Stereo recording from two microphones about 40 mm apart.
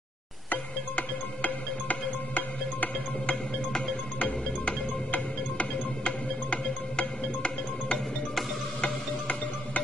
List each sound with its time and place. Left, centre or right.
0.5 s music: left